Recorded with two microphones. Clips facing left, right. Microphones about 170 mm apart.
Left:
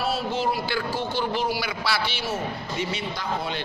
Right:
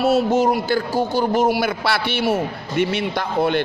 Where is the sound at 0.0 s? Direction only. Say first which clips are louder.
Right 9 dB; 45° right (ahead or behind).